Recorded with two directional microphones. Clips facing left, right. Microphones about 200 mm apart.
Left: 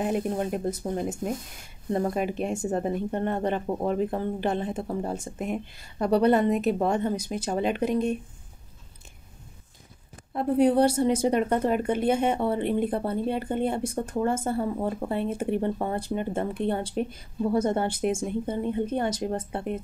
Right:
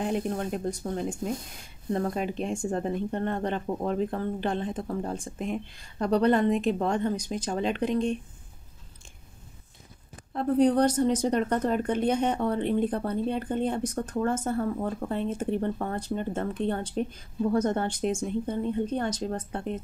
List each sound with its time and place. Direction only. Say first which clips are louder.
0.0 s speech: left 2 dB; 5° left (ahead or behind)
2.1 s speech: left 2 dB; 10° left (ahead or behind)
10.3 s speech: left 1 dB; 10° left (ahead or behind)